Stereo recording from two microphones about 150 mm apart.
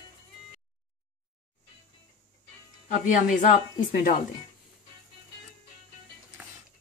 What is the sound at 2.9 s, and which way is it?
Speech, 60° left (ahead or behind).